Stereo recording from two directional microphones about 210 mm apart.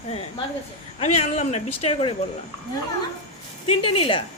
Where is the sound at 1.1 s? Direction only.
30° left (ahead or behind).